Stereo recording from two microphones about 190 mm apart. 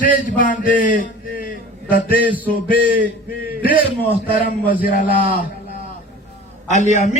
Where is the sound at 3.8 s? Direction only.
30° right (ahead or behind).